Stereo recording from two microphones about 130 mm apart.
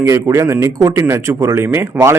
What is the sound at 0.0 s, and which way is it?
A man's voice, 20° right (ahead or behind).